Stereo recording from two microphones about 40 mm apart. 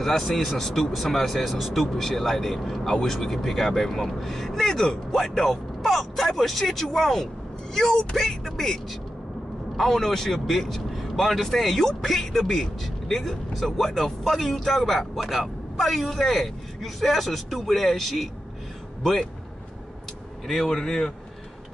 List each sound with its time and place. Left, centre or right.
0.0 s speech: centre
9.8 s a man's voice: centre
20.4 s a man's voice: centre